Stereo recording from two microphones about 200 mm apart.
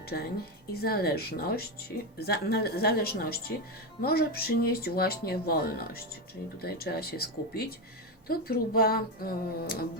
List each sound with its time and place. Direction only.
0.0 s a woman's voice: 50° left (ahead or behind)